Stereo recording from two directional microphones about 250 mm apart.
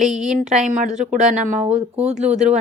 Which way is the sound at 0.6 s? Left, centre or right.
Right.